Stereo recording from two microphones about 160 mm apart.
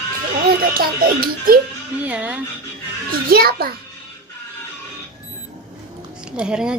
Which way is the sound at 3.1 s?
65° right (ahead or behind).